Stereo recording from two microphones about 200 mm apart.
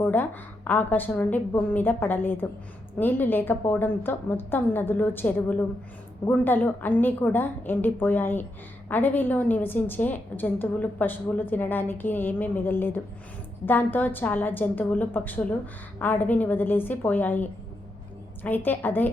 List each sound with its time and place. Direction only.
0.0 s a woman's voice: 10° left (ahead or behind)